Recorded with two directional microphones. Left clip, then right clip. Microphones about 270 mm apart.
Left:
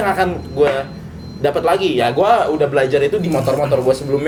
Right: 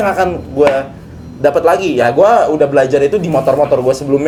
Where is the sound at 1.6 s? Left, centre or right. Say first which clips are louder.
Right 4 dB; right.